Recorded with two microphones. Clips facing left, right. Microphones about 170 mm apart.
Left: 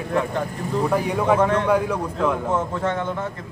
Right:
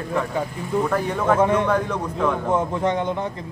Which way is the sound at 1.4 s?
10° right (ahead or behind).